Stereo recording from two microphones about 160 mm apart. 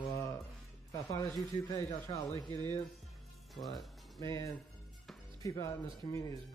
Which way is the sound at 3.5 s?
Centre (ahead or behind).